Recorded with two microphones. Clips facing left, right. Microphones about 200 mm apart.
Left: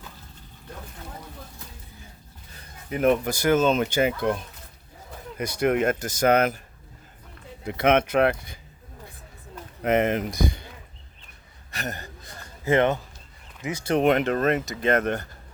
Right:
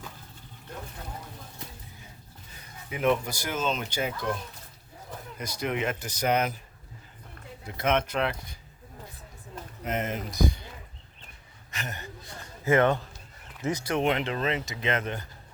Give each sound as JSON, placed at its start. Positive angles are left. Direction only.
{"t": 2.9, "sound": "speech", "side_deg": 45}
{"t": 5.4, "sound": "speech", "side_deg": 60}
{"t": 7.7, "sound": "speech", "side_deg": 70}
{"t": 9.8, "sound": "speech", "side_deg": 65}
{"t": 11.7, "sound": "speech", "side_deg": 35}
{"t": 14.6, "sound": "speech", "side_deg": 40}
{"t": 15.0, "sound": "speech", "side_deg": 70}